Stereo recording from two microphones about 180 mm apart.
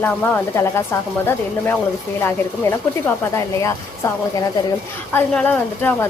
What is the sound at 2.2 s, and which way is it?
Speech, 15° left (ahead or behind).